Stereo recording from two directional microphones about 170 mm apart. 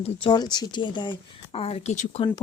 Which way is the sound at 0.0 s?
30° left (ahead or behind).